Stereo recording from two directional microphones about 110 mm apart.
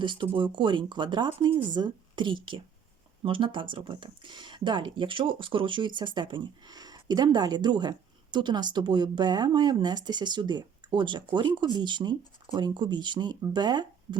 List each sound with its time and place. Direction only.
0.0 s speech: 45° right (ahead or behind)